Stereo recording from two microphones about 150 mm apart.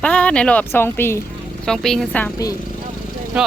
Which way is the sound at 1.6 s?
5° left (ahead or behind).